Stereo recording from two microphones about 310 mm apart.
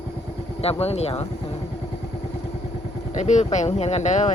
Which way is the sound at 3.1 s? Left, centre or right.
Left.